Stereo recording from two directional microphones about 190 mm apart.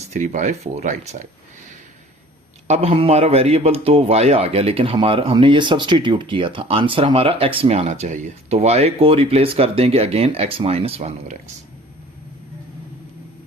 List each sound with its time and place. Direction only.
0.1 s a man's voice: 40° right (ahead or behind)
2.6 s a man's voice: 35° right (ahead or behind)